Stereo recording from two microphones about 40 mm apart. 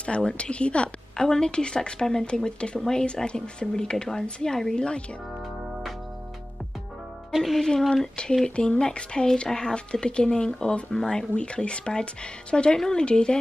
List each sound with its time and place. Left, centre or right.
0.0 s speech: left
1.1 s a woman's voice: centre
7.3 s speech: centre
7.8 s a woman's voice: centre
8.5 s a woman's voice: left
11.3 s speech: left
12.7 s a woman's voice: centre